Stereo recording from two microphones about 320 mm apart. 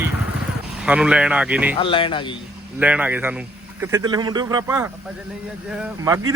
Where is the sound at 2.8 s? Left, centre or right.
Centre.